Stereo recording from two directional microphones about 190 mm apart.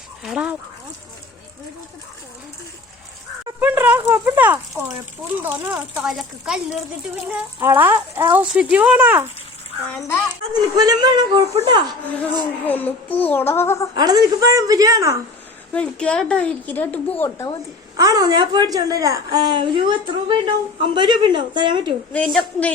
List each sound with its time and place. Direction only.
0.2 s speech: centre (ahead or behind)
3.6 s speech: 10° right (ahead or behind)
6.0 s speech: 5° right (ahead or behind)
9.9 s a woman's voice: 10° left (ahead or behind)
10.8 s a woman's voice: 20° right (ahead or behind)
12.6 s a woman's voice: 10° left (ahead or behind)
13.9 s a woman's voice: 20° right (ahead or behind)
15.7 s a woman's voice: 5° left (ahead or behind)
17.9 s a woman's voice: 20° right (ahead or behind)
22.1 s a woman's voice: 5° left (ahead or behind)